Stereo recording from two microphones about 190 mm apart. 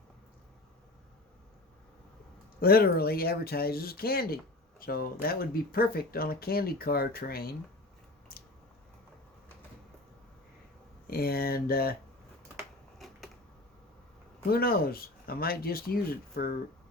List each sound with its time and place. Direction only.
2.6 s speech: 50° left (ahead or behind)
8.3 s a sound: 50° left (ahead or behind)
11.0 s speech: 50° left (ahead or behind)
13.0 s typewriter: centre (ahead or behind)
14.5 s speech: 50° left (ahead or behind)